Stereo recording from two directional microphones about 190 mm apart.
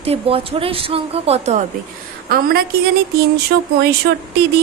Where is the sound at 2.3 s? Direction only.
55° right (ahead or behind).